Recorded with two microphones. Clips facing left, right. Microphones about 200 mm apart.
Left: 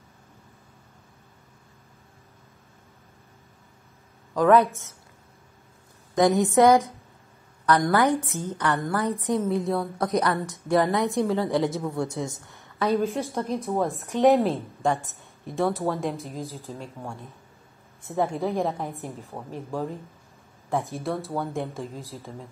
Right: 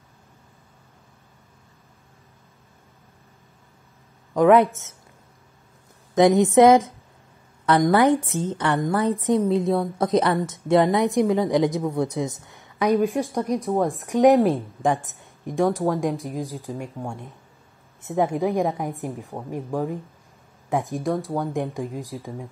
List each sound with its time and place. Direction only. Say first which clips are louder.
4.3 s a sound: right 3 dB; 20° right (ahead or behind)
6.1 s a woman's voice: right 4 dB; 20° right (ahead or behind)
13.7 s a woman's voice: right 2 dB; centre (ahead or behind)
14.0 s a woman's voice: right 3 dB; 15° right (ahead or behind)
18.1 s a woman's voice: right 4 dB; 15° right (ahead or behind)